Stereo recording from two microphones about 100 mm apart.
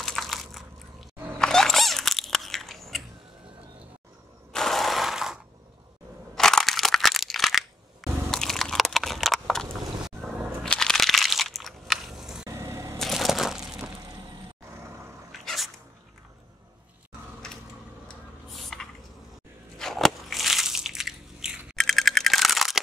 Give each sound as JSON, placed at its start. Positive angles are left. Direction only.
{"t": 0.0, "sound": "typing", "side_deg": 5}
{"t": 1.4, "sound": "biting", "side_deg": 5}
{"t": 4.5, "sound": "ratchet", "side_deg": 5}
{"t": 6.3, "sound": "crushing", "side_deg": 5}
{"t": 10.7, "sound": "crunch", "side_deg": 5}
{"t": 12.4, "sound": "vehicle", "side_deg": -30}
{"t": 13.0, "sound": "crushing", "side_deg": 0}
{"t": 13.9, "sound": "a sound", "side_deg": -40}
{"t": 15.3, "sound": "a sound", "side_deg": 0}
{"t": 17.4, "sound": "a sound", "side_deg": 5}
{"t": 19.8, "sound": "biting", "side_deg": 5}